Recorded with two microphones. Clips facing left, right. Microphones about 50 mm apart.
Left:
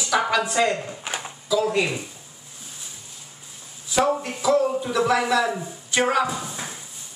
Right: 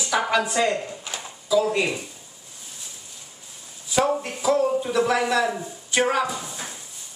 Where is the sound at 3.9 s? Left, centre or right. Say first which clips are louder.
Left 1 dB; centre.